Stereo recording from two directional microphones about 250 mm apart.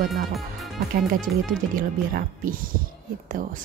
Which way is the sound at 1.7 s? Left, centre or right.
Right.